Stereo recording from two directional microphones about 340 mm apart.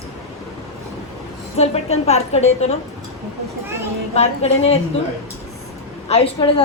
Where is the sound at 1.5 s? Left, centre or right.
Centre.